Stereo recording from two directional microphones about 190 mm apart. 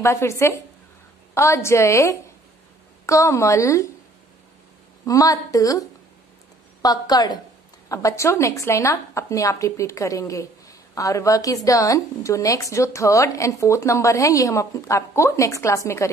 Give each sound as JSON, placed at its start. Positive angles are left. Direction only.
{"t": 0.0, "sound": "a woman's voice", "side_deg": 15}
{"t": 5.0, "sound": "a woman's voice", "side_deg": 20}